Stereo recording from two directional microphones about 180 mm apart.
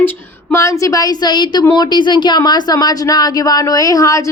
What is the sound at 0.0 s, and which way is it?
A woman's voice, 15° left (ahead or behind).